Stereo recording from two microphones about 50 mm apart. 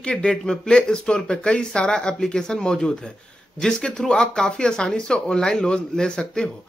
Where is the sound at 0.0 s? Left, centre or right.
Centre.